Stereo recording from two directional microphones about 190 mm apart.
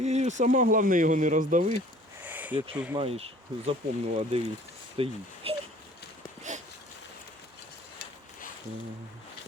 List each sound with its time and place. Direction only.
0.0 s speech: 35° right (ahead or behind)
2.2 s a sound: 10° right (ahead or behind)
2.9 s speech: 30° right (ahead or behind)